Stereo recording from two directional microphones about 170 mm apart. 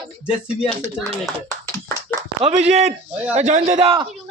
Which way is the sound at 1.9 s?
15° left (ahead or behind).